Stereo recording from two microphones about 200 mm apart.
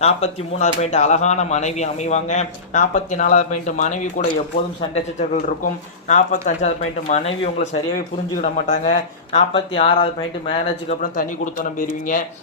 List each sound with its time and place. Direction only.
0.0 s speech: 35° left (ahead or behind)